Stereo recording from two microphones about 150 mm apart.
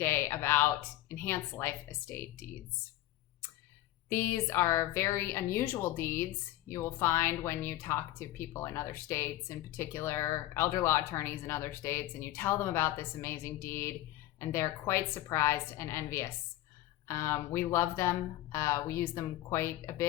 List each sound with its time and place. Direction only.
0.0 s speech: 15° left (ahead or behind)
4.1 s speech: 15° left (ahead or behind)